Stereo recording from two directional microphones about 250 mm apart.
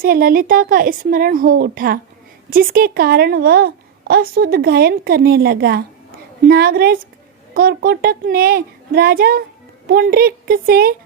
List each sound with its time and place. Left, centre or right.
0.0 s a woman's voice: right